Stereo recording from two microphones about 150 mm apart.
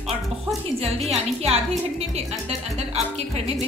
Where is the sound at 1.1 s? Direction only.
45° right (ahead or behind).